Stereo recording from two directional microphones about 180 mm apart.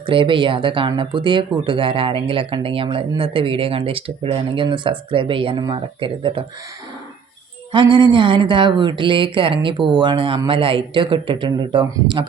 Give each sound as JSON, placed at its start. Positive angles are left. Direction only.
{"t": 0.0, "sound": "speech", "side_deg": -30}
{"t": 7.7, "sound": "speech", "side_deg": -25}